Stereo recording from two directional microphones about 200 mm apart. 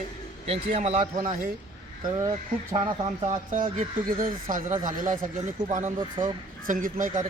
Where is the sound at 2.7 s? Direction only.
25° right (ahead or behind).